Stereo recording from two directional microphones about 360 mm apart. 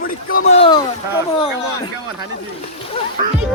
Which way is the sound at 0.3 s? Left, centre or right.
Left.